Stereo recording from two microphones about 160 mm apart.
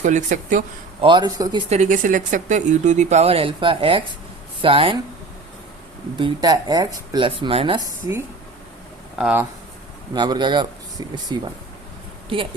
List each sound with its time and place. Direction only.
0.0 s speech: 50° right (ahead or behind)
1.0 s speech: 30° right (ahead or behind)
1.7 s speech: 50° right (ahead or behind); by 4.9 s 35° right (ahead or behind)
6.1 s speech: 30° right (ahead or behind)
9.1 s speech: 10° right (ahead or behind)
10.2 s speech: 30° right (ahead or behind)